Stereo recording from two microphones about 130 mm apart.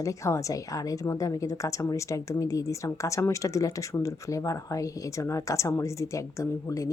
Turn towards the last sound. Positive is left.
turn(degrees=25)  # may be behind; listen again after turning